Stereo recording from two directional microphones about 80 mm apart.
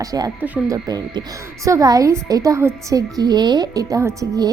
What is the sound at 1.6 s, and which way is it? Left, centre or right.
A woman's voice, right.